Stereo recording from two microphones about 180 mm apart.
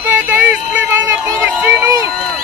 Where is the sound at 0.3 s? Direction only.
10° right (ahead or behind).